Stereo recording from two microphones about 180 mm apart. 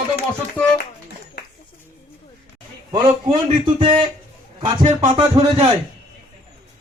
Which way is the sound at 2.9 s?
30° right (ahead or behind).